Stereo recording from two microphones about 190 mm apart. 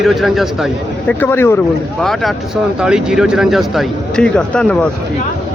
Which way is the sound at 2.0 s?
Centre (ahead or behind).